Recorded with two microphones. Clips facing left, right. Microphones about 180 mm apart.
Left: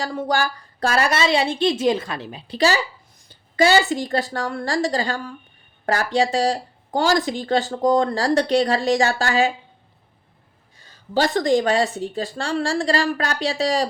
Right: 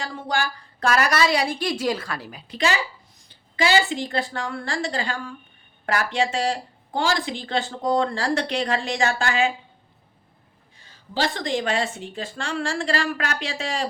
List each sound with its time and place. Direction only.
0.0 s a woman's voice: 40° left (ahead or behind)
10.8 s speech: 45° left (ahead or behind)